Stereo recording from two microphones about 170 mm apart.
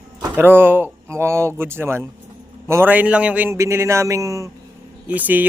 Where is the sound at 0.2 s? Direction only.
10° right (ahead or behind).